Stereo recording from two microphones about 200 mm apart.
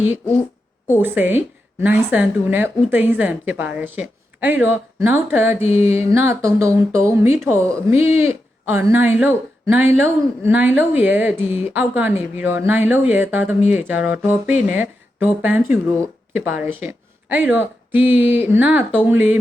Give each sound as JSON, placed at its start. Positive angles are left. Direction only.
{"t": 0.9, "sound": "a woman's voice", "side_deg": -10}